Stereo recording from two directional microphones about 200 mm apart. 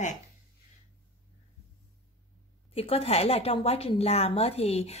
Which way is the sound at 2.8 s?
30° left (ahead or behind).